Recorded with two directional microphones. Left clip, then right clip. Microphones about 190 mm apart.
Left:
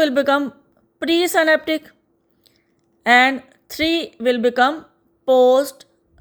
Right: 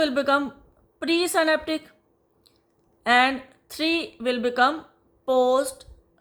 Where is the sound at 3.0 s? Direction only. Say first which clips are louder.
Left 6 dB; 35° left (ahead or behind).